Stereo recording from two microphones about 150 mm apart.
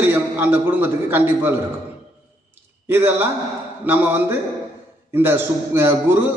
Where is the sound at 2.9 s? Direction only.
15° right (ahead or behind).